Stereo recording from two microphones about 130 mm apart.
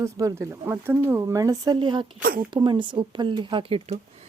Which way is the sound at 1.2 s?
25° right (ahead or behind).